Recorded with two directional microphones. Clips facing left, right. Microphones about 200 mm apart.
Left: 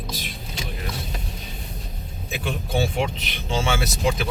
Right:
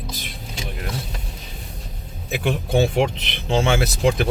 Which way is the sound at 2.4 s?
65° right (ahead or behind).